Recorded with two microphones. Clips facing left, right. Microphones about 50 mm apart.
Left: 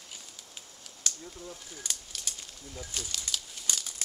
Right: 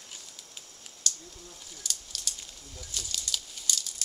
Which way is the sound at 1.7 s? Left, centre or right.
Left.